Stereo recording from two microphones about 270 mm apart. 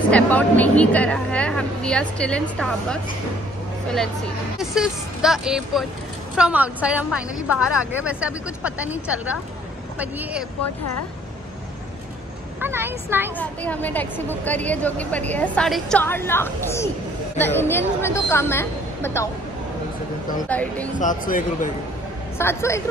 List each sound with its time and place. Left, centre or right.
0.1 s a woman's voice: centre
4.6 s a woman's voice: centre
12.5 s speech: centre
13.4 s a woman's voice: centre
20.4 s a woman's voice: centre
21.0 s speech: left
22.4 s a woman's voice: centre